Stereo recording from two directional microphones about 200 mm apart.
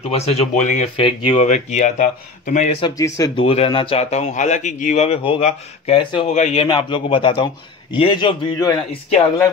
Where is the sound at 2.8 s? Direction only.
15° left (ahead or behind).